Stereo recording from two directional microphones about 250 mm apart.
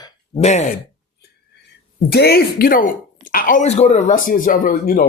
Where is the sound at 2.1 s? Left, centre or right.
Left.